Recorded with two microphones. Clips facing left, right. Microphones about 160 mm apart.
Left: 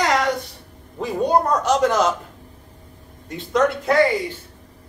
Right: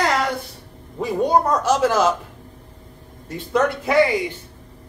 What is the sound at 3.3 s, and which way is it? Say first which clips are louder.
Speech: left 1 dB; 5° right (ahead or behind).